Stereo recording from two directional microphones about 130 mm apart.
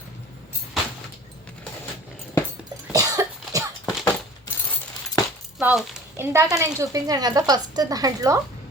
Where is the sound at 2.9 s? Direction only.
25° right (ahead or behind).